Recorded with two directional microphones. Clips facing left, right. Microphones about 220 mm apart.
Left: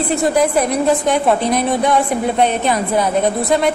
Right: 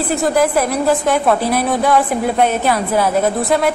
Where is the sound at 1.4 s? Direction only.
5° right (ahead or behind).